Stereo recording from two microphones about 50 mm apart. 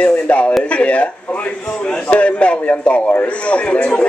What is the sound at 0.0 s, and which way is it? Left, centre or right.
A man's voice, left.